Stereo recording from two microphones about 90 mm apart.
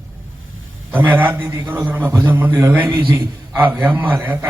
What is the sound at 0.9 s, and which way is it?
A man's voice, 20° right (ahead or behind).